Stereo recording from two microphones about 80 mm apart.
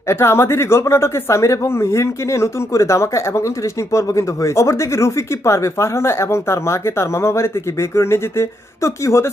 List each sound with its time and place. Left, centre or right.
0.1 s speech: left